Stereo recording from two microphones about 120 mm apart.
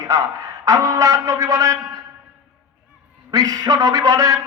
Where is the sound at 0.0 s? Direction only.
30° right (ahead or behind).